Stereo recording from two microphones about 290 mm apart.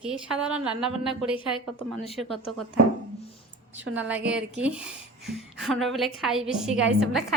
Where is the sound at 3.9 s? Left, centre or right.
Centre.